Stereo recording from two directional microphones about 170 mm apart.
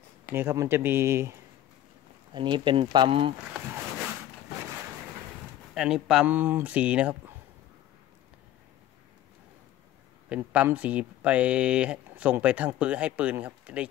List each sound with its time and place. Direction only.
0.3 s speech: 15° right (ahead or behind)
2.3 s speech: 30° right (ahead or behind)
5.8 s speech: 5° right (ahead or behind)
10.3 s speech: 10° right (ahead or behind)